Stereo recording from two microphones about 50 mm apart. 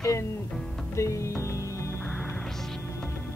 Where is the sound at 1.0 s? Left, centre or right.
Left.